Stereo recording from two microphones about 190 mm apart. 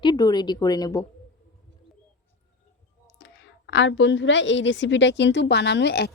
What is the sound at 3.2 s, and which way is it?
A woman's voice, 65° left (ahead or behind).